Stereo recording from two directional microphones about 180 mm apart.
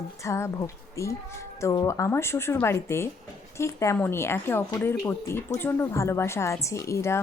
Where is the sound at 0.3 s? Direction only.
15° left (ahead or behind).